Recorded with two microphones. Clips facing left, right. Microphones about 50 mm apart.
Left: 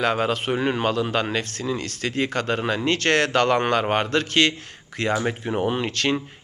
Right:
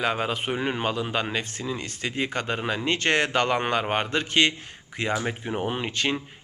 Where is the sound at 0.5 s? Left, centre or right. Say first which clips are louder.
Left 4 dB; centre.